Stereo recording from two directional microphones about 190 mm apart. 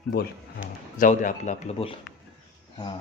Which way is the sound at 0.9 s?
45° left (ahead or behind).